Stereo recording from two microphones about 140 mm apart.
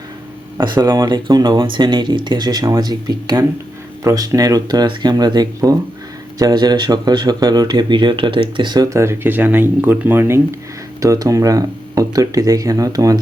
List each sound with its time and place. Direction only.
0.6 s speech: 30° right (ahead or behind)